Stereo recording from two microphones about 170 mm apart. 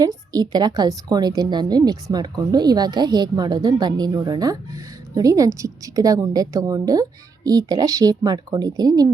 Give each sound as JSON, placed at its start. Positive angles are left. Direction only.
{"t": 0.0, "sound": "a woman's voice", "side_deg": -20}